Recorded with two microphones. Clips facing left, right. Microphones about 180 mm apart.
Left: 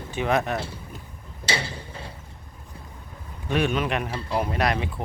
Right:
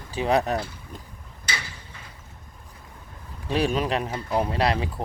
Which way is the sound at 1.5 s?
30° left (ahead or behind).